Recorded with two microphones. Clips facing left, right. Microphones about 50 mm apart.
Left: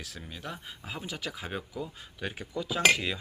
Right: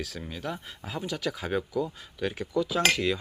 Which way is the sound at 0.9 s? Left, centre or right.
Centre.